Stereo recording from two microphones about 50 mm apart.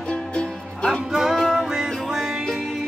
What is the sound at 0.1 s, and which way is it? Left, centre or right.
Music, left.